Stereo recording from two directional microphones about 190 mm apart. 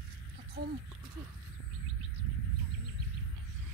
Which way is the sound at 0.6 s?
55° right (ahead or behind).